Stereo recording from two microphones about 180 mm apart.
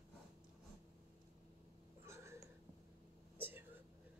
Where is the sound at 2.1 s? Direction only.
15° right (ahead or behind).